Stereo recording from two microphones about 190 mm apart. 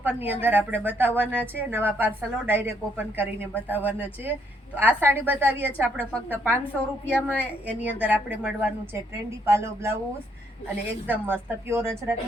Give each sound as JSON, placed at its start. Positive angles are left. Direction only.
{"t": 0.0, "sound": "speech", "side_deg": -10}
{"t": 11.1, "sound": "speech", "side_deg": -10}